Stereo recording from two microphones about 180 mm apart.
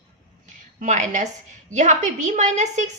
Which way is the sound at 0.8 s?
45° right (ahead or behind).